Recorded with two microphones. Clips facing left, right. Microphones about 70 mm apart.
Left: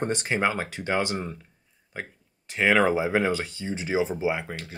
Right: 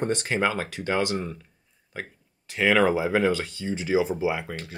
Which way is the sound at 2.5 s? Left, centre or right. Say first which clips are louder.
Even; left.